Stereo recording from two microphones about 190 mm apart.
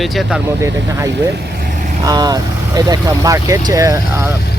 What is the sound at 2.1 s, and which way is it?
Speech, 20° right (ahead or behind).